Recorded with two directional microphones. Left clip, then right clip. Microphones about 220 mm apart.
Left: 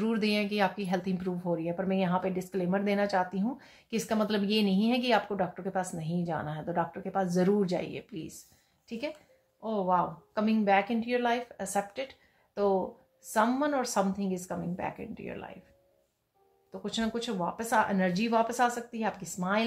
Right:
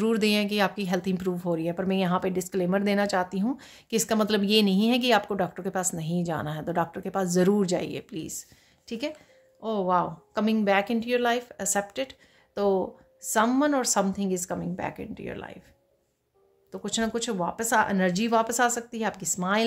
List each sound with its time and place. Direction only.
0.0 s speech: 45° right (ahead or behind)
9.6 s speech: 45° right (ahead or behind)
16.7 s speech: 45° right (ahead or behind)